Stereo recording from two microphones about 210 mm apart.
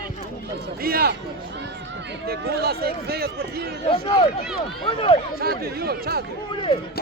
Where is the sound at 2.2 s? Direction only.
50° right (ahead or behind).